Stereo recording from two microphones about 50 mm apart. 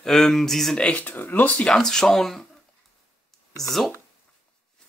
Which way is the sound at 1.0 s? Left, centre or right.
Left.